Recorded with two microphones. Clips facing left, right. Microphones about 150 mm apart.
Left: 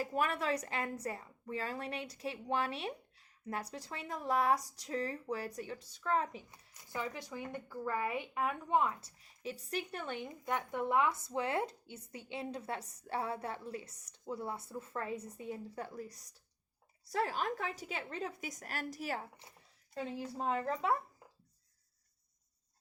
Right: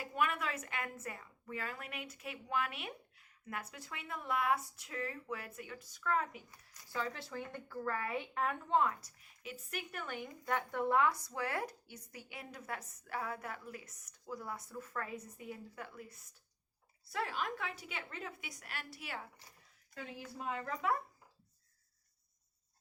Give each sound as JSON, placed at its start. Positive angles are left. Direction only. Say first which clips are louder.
{"t": 0.0, "sound": "a woman's voice", "louder": "left 2 dB", "side_deg": 35}
{"t": 6.7, "sound": "speech", "louder": "even", "side_deg": 20}
{"t": 9.0, "sound": "a woman's voice", "louder": "left 6 dB", "side_deg": 30}
{"t": 19.4, "sound": "speech", "louder": "left 3 dB", "side_deg": 25}